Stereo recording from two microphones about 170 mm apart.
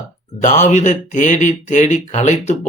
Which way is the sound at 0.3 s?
45° left (ahead or behind).